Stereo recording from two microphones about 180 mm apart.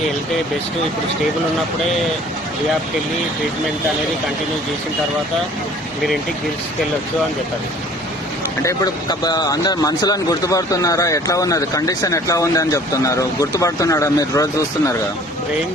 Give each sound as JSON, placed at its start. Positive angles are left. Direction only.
{"t": 8.6, "sound": "speech", "side_deg": 20}